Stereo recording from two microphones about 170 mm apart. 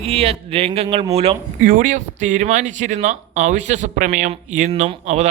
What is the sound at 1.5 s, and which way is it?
Speech, 55° right (ahead or behind).